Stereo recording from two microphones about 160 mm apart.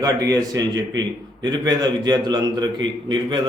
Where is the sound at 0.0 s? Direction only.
20° right (ahead or behind).